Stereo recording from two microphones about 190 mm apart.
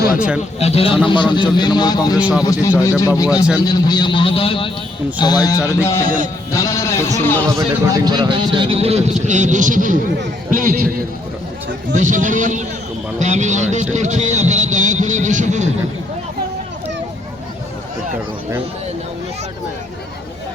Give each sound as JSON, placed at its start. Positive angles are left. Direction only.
{"t": 0.6, "sound": "a man's voice", "side_deg": 30}
{"t": 2.1, "sound": "a man's voice", "side_deg": -5}
{"t": 2.4, "sound": "a man's voice", "side_deg": 15}
{"t": 7.7, "sound": "a man's voice", "side_deg": -20}
{"t": 11.9, "sound": "a man's voice", "side_deg": -40}
{"t": 13.1, "sound": "a sound", "side_deg": -35}